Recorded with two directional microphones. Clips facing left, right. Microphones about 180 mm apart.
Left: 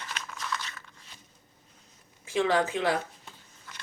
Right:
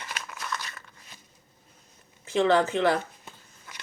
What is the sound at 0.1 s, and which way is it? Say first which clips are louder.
Crumpling: even; 10° right (ahead or behind).